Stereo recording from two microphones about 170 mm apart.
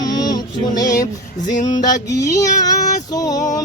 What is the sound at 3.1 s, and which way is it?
Music, 20° left (ahead or behind).